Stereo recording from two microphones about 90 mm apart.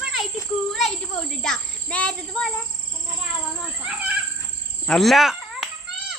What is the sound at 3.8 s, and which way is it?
Cricket, 15° right (ahead or behind).